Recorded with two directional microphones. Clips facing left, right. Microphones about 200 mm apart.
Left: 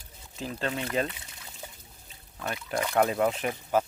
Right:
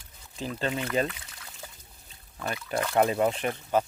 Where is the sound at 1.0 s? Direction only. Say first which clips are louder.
Right 2 dB; 25° left (ahead or behind).